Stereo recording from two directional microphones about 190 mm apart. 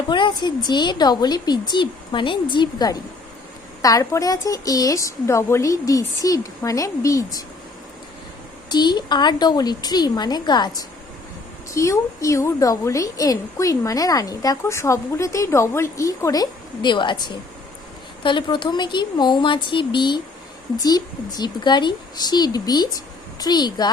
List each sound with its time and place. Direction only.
0.1 s a woman's voice: 25° left (ahead or behind)
8.7 s a woman's voice: 20° left (ahead or behind)
11.7 s a woman's voice: 15° left (ahead or behind)
21.3 s a woman's voice: 20° left (ahead or behind)